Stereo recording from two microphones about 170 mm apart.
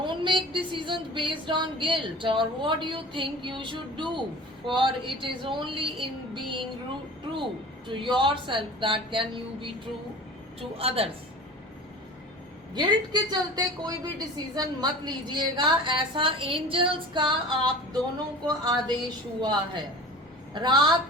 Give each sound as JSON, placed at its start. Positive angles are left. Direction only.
{"t": 0.0, "sound": "music", "side_deg": -30}
{"t": 7.9, "sound": "music", "side_deg": -30}
{"t": 10.6, "sound": "speech", "side_deg": -35}
{"t": 12.7, "sound": "music", "side_deg": -25}